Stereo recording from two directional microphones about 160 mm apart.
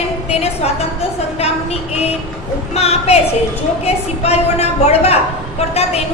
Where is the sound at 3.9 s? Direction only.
40° left (ahead or behind).